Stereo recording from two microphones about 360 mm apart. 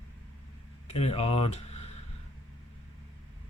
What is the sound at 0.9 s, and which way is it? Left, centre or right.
Speech, centre.